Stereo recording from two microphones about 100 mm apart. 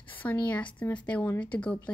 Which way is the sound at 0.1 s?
15° left (ahead or behind).